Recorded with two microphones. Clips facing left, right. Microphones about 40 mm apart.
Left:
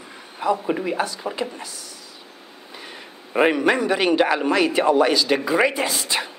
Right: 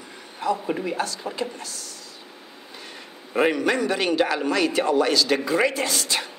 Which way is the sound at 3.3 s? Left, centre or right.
Centre.